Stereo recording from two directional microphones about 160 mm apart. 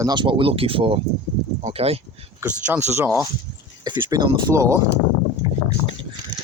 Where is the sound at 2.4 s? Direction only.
10° right (ahead or behind).